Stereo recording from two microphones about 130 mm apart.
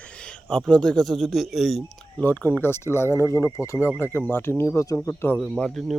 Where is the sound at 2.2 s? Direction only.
15° left (ahead or behind).